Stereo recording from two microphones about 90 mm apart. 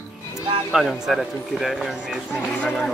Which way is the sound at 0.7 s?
5° right (ahead or behind).